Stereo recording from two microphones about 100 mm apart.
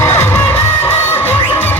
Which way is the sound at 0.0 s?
25° left (ahead or behind).